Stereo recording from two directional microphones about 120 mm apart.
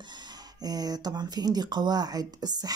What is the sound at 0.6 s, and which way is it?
Speech, 35° right (ahead or behind).